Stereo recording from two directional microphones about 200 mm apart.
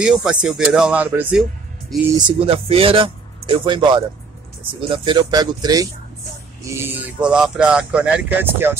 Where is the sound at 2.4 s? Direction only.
30° right (ahead or behind).